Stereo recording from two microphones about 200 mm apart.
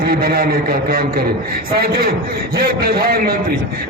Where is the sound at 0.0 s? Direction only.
50° right (ahead or behind).